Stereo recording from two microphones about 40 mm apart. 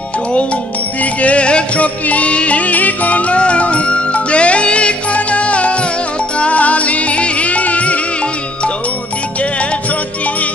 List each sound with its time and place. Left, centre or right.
1.2 s music: left